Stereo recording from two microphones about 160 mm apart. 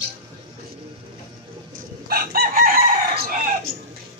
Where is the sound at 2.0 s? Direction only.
70° right (ahead or behind).